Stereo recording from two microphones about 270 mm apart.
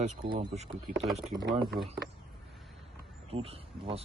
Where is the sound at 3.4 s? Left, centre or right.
Right.